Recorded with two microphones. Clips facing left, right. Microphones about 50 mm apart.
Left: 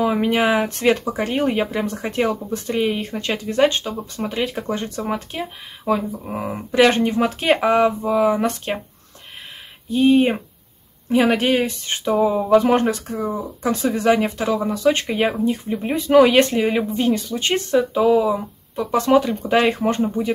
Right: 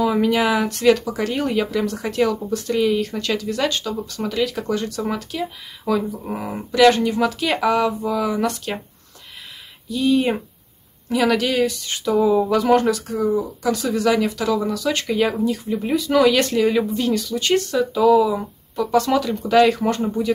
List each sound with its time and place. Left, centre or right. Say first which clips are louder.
0.0 s speech: even; left
9.8 s speech: left 3 dB; left